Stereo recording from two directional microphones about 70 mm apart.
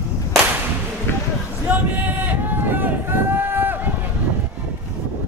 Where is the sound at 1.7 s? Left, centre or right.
Right.